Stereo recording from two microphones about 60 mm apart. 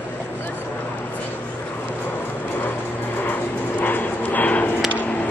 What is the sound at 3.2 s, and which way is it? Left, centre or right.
Dog, left.